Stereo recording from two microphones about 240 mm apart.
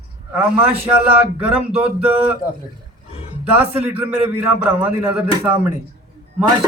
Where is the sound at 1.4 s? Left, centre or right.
Centre.